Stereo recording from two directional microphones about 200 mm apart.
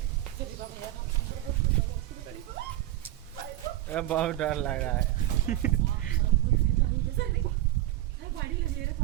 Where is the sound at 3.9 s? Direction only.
5° left (ahead or behind).